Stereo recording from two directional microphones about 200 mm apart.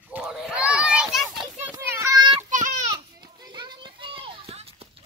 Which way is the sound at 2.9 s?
20° right (ahead or behind).